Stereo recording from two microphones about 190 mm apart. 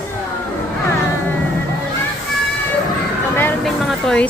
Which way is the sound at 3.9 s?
5° left (ahead or behind).